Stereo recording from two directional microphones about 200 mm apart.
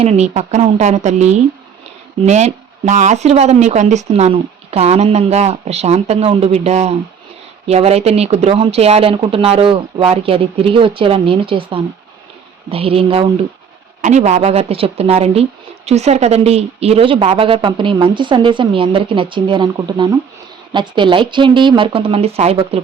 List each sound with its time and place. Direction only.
0.0 s a woman's voice: 35° right (ahead or behind)